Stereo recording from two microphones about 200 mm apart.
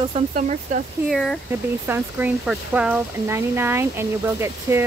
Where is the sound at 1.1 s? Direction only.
Centre (ahead or behind).